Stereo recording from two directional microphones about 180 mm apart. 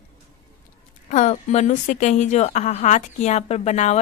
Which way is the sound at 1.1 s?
40° left (ahead or behind).